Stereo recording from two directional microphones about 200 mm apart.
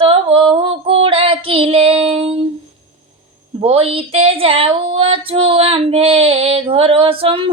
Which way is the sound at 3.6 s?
30° right (ahead or behind).